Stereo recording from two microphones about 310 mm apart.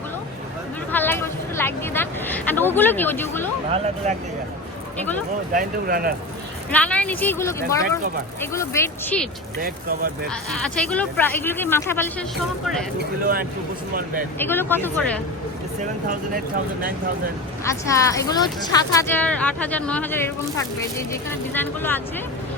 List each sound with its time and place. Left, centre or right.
0.9 s speech: centre
5.5 s speech: right
6.7 s speech: centre
9.6 s speech: right
10.8 s speech: centre
13.0 s speech: right
14.3 s speech: centre
15.8 s speech: right
17.6 s speech: centre